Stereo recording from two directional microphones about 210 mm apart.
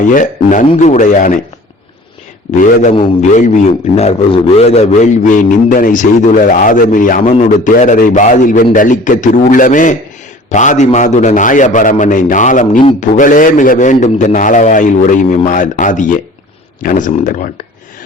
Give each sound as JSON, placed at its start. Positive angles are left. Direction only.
{"t": 0.1, "sound": "speech", "side_deg": 40}
{"t": 2.9, "sound": "speech", "side_deg": 35}